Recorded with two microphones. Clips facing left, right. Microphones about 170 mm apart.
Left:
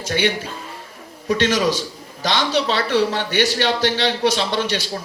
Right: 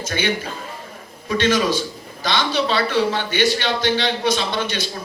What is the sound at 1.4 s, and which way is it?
A man's voice, 80° left.